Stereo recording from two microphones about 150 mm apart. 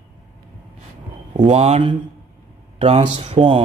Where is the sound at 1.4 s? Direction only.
45° right (ahead or behind).